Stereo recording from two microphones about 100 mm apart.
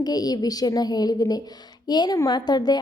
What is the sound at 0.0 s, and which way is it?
A woman's voice, 40° left (ahead or behind).